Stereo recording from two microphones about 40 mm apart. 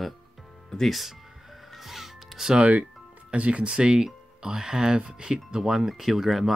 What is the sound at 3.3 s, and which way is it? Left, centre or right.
Speech, right.